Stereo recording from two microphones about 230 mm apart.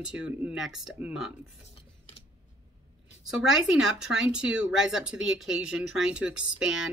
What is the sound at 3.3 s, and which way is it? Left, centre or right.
Speech, centre.